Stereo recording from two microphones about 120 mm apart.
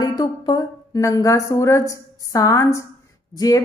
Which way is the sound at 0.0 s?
35° left (ahead or behind).